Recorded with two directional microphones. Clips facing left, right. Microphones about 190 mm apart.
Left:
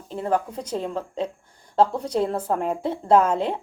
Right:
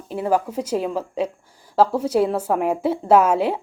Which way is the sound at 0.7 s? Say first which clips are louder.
Right 4 dB; 90° right.